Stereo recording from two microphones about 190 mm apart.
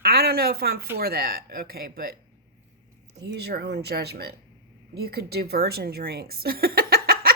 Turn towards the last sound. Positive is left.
turn(degrees=-50)  # may be behind; listen again after turning